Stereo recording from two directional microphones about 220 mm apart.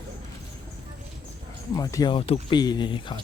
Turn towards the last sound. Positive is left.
turn(degrees=20)  # may be behind; listen again after turning